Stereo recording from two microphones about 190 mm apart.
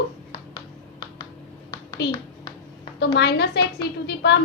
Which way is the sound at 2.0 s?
60° left (ahead or behind).